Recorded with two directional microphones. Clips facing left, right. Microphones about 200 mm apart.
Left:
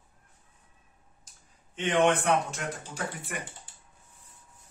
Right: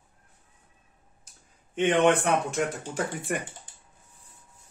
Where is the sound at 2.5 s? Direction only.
55° right (ahead or behind).